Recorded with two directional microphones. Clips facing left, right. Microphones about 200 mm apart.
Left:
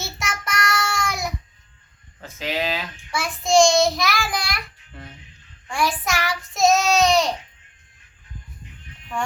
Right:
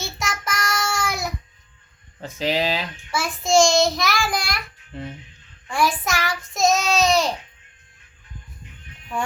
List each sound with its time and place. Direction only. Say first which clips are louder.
0.0 s child singing: right 2 dB; centre (ahead or behind)
2.2 s speech: right 3 dB; 35° right (ahead or behind)
3.1 s a child's voice: even; centre (ahead or behind)
5.6 s child singing: right 2 dB; centre (ahead or behind)